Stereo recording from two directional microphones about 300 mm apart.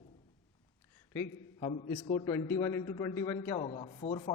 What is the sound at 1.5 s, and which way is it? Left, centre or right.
A man's voice, centre.